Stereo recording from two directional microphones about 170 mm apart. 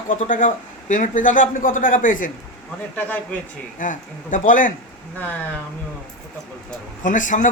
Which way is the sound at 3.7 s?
50° left (ahead or behind).